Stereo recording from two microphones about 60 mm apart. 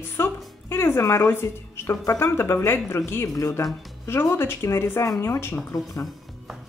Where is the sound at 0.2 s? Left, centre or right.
Left.